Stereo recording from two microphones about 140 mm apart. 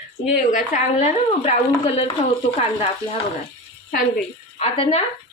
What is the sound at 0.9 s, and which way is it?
Speech, 50° left (ahead or behind).